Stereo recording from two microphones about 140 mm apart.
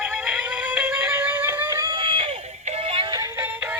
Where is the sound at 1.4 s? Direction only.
15° right (ahead or behind).